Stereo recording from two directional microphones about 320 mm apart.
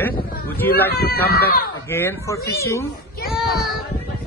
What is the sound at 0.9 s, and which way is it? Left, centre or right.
Speech, left.